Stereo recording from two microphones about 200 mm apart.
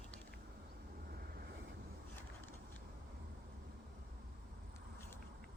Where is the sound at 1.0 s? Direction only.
50° right (ahead or behind).